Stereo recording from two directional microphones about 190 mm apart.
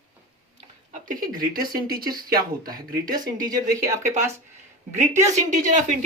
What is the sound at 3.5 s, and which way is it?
Speech, 15° right (ahead or behind).